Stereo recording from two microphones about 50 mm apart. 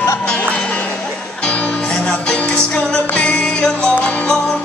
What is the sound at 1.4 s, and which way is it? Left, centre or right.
Music, left.